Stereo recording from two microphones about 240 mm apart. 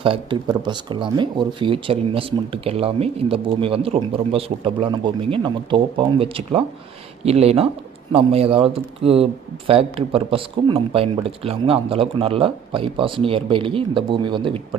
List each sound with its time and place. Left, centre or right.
0.0 s speech: right